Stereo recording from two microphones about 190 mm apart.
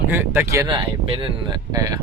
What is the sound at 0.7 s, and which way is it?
Speech, 25° right (ahead or behind).